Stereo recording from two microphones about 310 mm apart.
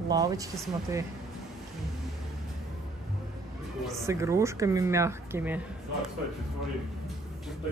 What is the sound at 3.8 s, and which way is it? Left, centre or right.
Speech, centre.